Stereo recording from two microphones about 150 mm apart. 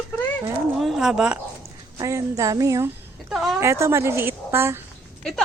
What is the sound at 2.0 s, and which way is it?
Speech, 20° right (ahead or behind).